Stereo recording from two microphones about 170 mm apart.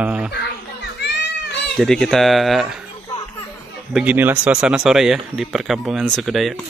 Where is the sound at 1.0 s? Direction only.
90° left.